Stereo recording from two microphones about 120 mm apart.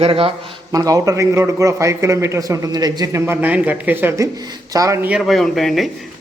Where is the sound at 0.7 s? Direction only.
30° right (ahead or behind).